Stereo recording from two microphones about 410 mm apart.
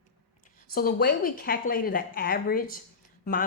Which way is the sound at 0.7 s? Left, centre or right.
Left.